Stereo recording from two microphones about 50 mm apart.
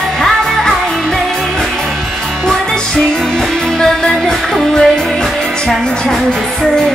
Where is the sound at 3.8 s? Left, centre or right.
Centre.